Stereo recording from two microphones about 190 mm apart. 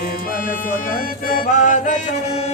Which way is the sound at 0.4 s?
45° left (ahead or behind).